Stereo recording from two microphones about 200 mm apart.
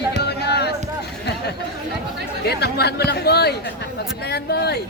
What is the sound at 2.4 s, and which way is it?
Speech, 55° left (ahead or behind).